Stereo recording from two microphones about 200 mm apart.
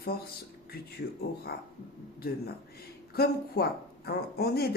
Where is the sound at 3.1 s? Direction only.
50° left (ahead or behind).